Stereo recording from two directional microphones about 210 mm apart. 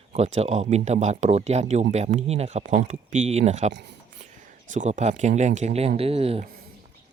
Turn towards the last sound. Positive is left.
turn(degrees=-30)  # may be behind; listen again after turning